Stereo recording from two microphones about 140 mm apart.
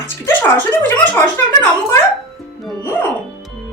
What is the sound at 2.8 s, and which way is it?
Music, 15° left (ahead or behind).